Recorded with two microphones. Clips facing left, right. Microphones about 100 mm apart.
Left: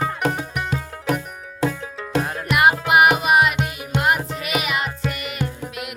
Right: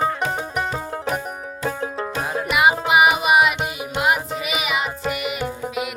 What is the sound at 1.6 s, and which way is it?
Music, 90° left.